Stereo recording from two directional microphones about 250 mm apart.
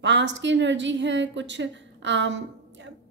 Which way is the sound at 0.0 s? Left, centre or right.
Right.